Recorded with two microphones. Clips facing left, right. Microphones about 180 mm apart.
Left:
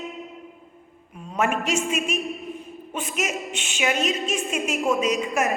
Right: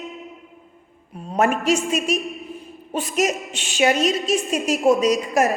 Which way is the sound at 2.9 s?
35° right (ahead or behind).